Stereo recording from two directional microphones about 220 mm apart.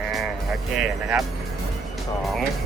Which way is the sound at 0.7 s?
Centre (ahead or behind).